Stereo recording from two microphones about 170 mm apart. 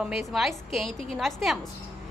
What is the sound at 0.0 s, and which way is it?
Speech, centre (ahead or behind).